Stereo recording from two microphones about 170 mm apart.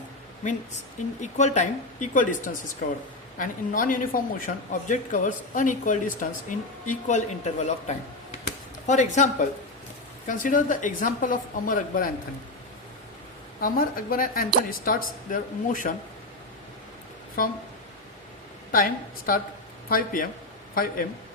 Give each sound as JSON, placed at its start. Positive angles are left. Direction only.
{"t": 1.2, "sound": "a woman's voice", "side_deg": 45}
{"t": 13.6, "sound": "a woman's voice", "side_deg": 55}
{"t": 17.4, "sound": "a woman's voice", "side_deg": 55}
{"t": 18.7, "sound": "a woman's voice", "side_deg": 55}